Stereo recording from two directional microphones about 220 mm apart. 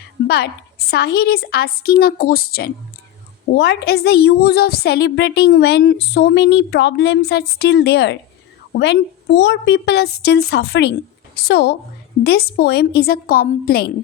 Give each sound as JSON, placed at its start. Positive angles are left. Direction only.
{"t": 0.3, "sound": "a woman's voice", "side_deg": 45}